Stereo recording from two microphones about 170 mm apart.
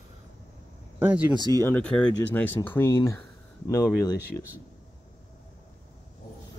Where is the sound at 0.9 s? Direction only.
10° right (ahead or behind).